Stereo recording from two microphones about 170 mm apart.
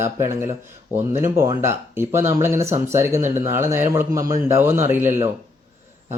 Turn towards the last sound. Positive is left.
turn(degrees=-15)  # may be behind; listen again after turning